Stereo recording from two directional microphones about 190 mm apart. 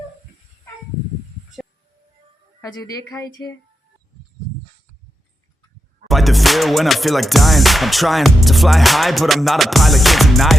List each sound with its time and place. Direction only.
2.6 s speech: 20° left (ahead or behind)
6.1 s music: centre (ahead or behind)